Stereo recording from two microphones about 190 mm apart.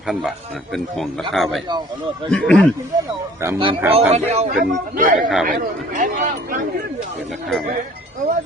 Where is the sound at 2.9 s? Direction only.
20° right (ahead or behind).